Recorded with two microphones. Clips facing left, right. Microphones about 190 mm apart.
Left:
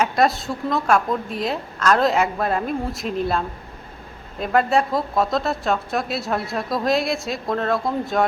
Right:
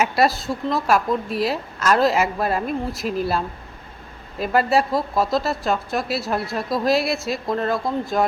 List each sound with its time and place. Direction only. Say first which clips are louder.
0.0 s speech: even; 5° right (ahead or behind)